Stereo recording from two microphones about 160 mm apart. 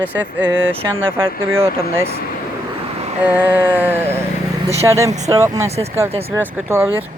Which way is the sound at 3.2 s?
10° right (ahead or behind).